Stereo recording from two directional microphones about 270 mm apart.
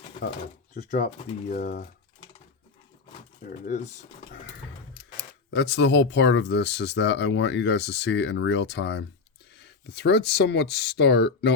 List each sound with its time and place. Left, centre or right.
0.7 s speech: left
3.4 s speech: left
5.5 s speech: left